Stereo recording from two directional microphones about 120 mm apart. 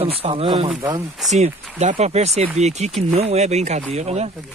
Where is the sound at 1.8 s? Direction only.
65° right (ahead or behind).